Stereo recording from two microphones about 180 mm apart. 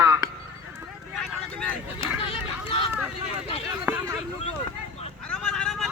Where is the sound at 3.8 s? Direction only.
10° right (ahead or behind).